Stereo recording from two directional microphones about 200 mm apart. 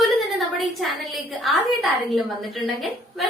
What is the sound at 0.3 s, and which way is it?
A woman's voice, centre (ahead or behind).